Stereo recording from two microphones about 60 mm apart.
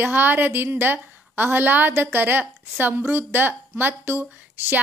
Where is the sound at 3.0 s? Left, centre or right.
Right.